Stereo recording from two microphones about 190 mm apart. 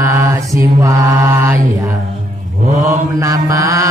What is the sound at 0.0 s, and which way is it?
Mantra, 15° right (ahead or behind).